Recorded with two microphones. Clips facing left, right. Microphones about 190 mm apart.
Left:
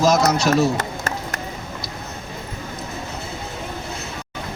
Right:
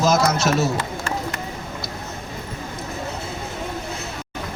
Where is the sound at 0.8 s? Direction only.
40° left (ahead or behind).